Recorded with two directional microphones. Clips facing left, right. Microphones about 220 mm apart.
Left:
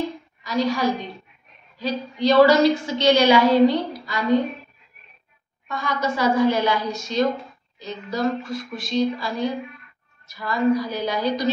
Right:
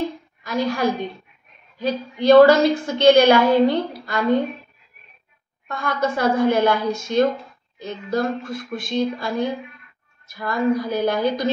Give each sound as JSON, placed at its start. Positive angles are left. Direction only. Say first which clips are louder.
{"t": 0.4, "sound": "a woman's voice", "louder": "even", "side_deg": -55}
{"t": 5.7, "sound": "a woman's voice", "louder": "right 2 dB", "side_deg": -55}